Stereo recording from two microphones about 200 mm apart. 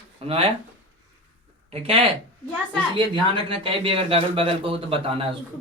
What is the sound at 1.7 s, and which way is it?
Speech, 30° right (ahead or behind).